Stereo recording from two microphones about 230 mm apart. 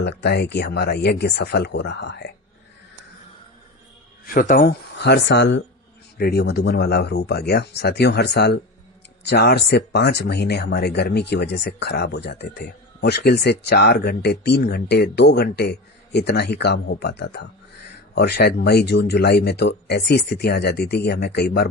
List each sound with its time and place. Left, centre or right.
0.0 s speech: left
4.4 s speech: left